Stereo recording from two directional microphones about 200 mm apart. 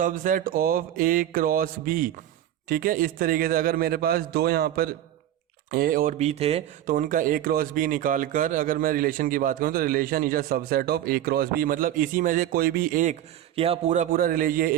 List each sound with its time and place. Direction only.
0.0 s speech: 40° right (ahead or behind)
13.6 s speech: 30° right (ahead or behind)